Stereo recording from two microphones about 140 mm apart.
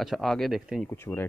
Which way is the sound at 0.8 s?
15° left (ahead or behind).